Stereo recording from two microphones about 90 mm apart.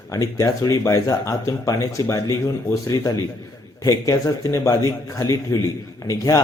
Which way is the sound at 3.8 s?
35° left (ahead or behind).